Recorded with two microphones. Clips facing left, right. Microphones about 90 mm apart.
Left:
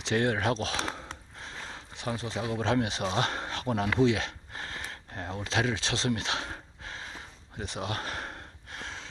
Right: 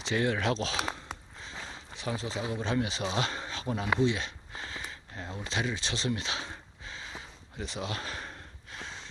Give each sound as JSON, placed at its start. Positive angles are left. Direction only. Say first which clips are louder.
{"t": 0.0, "sound": "speech", "louder": "left 2 dB", "side_deg": 55}
{"t": 0.8, "sound": "a sound", "louder": "even", "side_deg": -10}
{"t": 2.0, "sound": "speech", "louder": "left 1 dB", "side_deg": 55}
{"t": 2.6, "sound": "speech", "louder": "left 5 dB", "side_deg": 70}
{"t": 3.0, "sound": "speech", "louder": "left 2 dB", "side_deg": 45}
{"t": 4.0, "sound": "speech", "louder": "left 6 dB", "side_deg": 90}
{"t": 4.5, "sound": "sniff", "louder": "right 1 dB", "side_deg": 55}
{"t": 5.4, "sound": "speech", "louder": "left 4 dB", "side_deg": 90}
{"t": 7.6, "sound": "a sound", "louder": "left 2 dB", "side_deg": 55}